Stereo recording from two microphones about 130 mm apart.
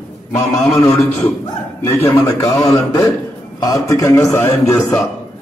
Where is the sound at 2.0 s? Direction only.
20° left (ahead or behind).